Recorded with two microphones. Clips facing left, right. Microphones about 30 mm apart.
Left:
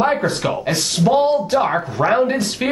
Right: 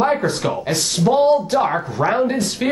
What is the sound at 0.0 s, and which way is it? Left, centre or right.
Speech, centre.